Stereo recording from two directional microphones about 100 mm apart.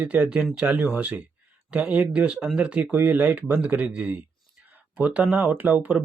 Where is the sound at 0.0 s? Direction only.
15° right (ahead or behind).